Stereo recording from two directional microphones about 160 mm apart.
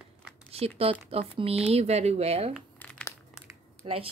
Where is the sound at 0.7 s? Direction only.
40° right (ahead or behind).